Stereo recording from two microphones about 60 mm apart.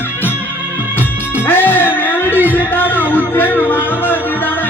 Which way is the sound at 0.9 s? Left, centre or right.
Left.